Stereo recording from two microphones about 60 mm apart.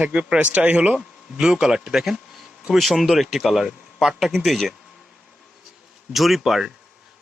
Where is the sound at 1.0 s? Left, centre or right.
Centre.